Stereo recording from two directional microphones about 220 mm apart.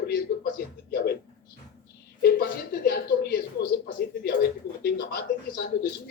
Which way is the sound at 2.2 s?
45° left (ahead or behind).